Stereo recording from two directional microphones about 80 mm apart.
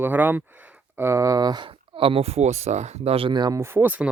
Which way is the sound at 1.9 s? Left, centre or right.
Right.